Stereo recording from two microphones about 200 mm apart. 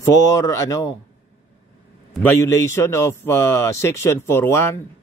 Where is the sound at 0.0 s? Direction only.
15° left (ahead or behind).